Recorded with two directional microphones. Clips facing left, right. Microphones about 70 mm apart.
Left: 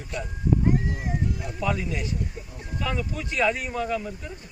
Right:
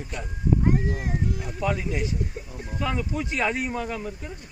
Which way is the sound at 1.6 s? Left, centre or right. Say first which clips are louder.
Right 1 dB; right.